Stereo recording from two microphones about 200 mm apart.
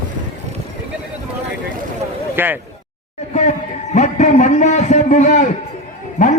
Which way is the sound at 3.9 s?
35° left (ahead or behind).